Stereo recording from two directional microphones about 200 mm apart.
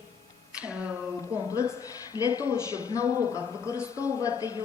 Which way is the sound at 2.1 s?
20° left (ahead or behind).